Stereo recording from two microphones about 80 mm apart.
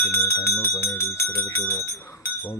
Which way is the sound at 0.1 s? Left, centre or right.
Left.